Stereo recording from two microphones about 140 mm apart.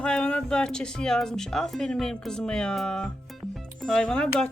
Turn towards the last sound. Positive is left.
turn(degrees=5)  # may be behind; listen again after turning